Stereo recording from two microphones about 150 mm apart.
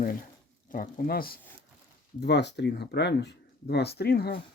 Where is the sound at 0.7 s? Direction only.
65° left (ahead or behind).